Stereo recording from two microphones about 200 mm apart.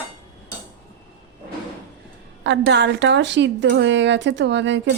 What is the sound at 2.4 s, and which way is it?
A woman's voice, 60° right (ahead or behind).